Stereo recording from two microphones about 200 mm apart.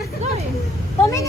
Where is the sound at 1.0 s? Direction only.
15° left (ahead or behind).